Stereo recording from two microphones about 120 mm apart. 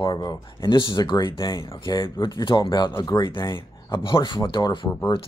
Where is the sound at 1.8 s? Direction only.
40° left (ahead or behind).